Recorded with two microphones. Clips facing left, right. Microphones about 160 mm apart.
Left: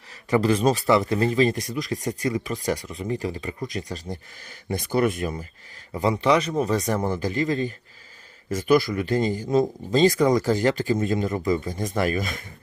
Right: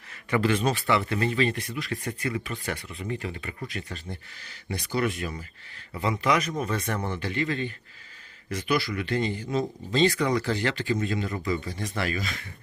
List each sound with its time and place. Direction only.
0.3 s speech: 35° left (ahead or behind)
5.9 s speech: 35° left (ahead or behind)